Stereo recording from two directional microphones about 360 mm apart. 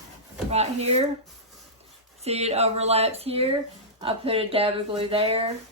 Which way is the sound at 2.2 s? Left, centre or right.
Centre.